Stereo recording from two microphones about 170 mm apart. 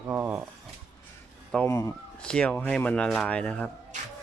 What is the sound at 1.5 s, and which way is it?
Speech, 15° left (ahead or behind).